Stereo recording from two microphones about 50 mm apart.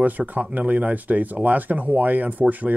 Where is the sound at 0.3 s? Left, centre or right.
Right.